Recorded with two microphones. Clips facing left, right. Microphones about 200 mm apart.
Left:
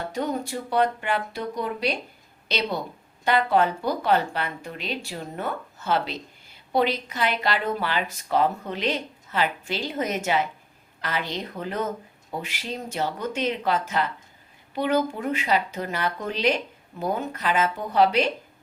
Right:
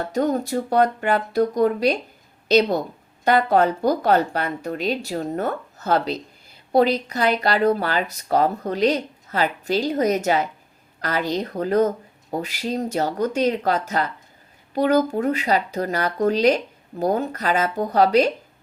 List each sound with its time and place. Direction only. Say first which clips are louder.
0.1 s a woman's voice: right 8 dB; 40° right (ahead or behind)